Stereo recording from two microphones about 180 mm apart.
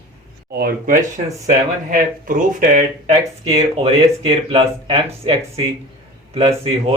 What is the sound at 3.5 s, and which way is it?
Speech, 30° right (ahead or behind).